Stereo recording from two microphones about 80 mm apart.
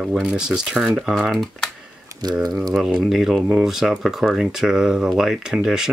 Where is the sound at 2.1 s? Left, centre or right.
Right.